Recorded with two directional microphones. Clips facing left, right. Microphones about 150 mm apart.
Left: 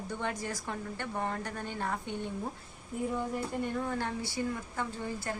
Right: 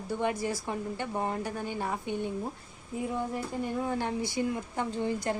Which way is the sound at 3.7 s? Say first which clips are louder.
Right 3 dB; 15° right (ahead or behind).